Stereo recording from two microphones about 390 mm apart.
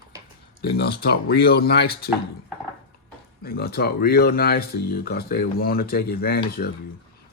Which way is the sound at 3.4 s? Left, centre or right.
Left.